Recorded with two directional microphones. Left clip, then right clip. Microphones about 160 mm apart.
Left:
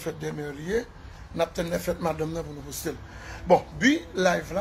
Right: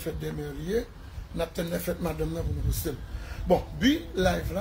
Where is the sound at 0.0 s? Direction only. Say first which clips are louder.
Left 2 dB; 20° right (ahead or behind).